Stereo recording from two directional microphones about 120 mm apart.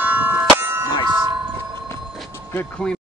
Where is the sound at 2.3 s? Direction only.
20° left (ahead or behind).